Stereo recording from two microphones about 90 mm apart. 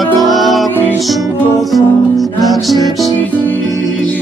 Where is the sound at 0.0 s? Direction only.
Centre (ahead or behind).